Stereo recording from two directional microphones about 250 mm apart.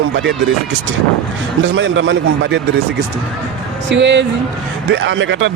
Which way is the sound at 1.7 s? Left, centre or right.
Right.